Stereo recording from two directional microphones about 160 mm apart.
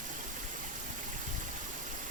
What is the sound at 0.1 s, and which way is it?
Stream, 50° right (ahead or behind).